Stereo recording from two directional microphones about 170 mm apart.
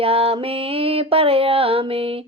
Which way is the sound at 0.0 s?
35° right (ahead or behind).